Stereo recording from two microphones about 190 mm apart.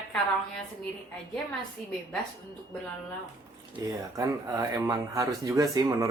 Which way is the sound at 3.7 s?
15° right (ahead or behind).